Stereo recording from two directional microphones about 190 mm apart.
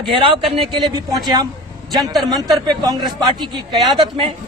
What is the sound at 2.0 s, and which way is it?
Speech, centre (ahead or behind).